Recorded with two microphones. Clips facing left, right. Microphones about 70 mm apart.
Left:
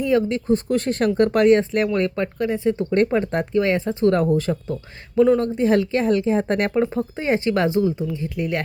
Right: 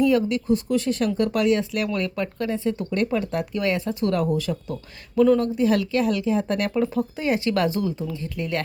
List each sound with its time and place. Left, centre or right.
0.0 s speech: left
2.9 s speech: left
5.1 s speech: left